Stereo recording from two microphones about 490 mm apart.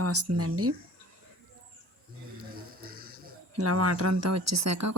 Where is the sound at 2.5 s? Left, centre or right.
Centre.